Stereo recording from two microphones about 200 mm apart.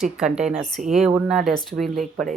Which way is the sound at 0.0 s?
5° right (ahead or behind).